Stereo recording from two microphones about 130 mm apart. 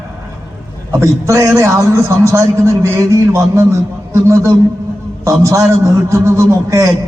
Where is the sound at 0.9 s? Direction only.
20° right (ahead or behind).